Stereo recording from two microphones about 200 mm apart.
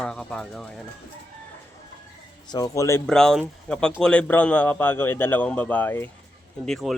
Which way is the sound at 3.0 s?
Centre (ahead or behind).